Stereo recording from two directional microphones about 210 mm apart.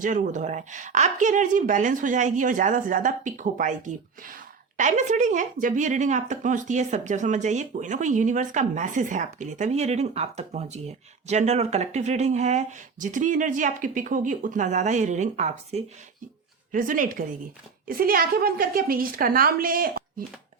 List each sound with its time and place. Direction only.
0.0 s a woman's voice: 40° right (ahead or behind)